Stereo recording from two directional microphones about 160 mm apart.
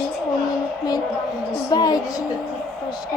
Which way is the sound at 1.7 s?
25° left (ahead or behind).